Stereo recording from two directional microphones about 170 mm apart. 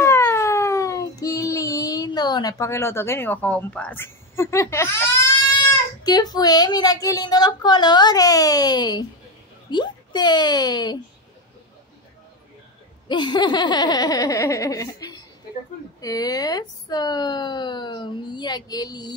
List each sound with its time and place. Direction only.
0.0 s child singing: 15° left (ahead or behind)
6.0 s speech: 25° left (ahead or behind)
13.1 s speech: 25° left (ahead or behind)